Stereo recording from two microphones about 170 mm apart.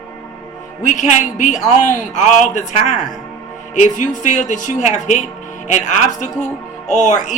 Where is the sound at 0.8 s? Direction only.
45° left (ahead or behind).